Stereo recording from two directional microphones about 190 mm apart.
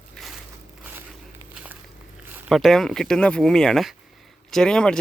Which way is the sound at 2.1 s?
10° right (ahead or behind).